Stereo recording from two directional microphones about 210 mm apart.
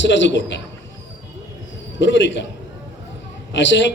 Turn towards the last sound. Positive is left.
turn(degrees=60)  # may be behind; listen again after turning